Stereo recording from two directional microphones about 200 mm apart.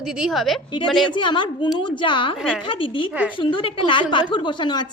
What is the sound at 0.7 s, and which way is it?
A woman's voice, 25° left (ahead or behind).